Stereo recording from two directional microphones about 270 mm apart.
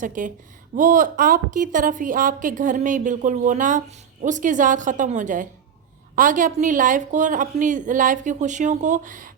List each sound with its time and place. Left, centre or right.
0.0 s a woman's voice: right